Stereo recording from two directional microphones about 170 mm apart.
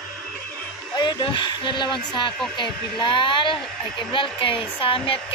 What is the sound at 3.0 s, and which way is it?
Speech, 30° left (ahead or behind).